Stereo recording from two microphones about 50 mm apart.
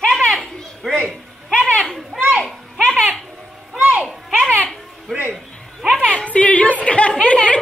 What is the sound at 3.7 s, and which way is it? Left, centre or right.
Children playing, right.